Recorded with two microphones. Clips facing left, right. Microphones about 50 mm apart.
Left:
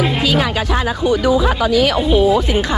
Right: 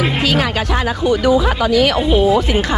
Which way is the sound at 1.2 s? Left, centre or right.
Right.